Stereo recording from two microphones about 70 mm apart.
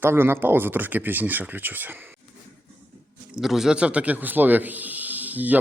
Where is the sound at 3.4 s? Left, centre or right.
Centre; by 5.5 s right.